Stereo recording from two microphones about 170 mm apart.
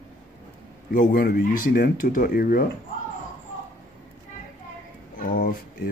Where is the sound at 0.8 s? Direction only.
60° left (ahead or behind).